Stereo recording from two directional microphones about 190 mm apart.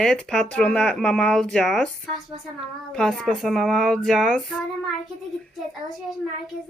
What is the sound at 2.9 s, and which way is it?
Speech, centre (ahead or behind).